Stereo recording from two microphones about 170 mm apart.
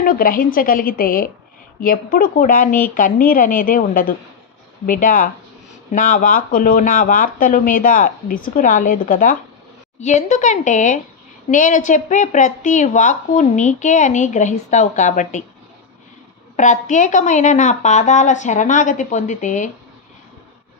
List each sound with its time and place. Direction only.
0.0 s a woman's voice: 55° left (ahead or behind)
16.6 s a woman's voice: 45° left (ahead or behind)